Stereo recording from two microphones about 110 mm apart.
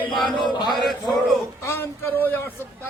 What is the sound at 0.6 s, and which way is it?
Music, 45° left (ahead or behind).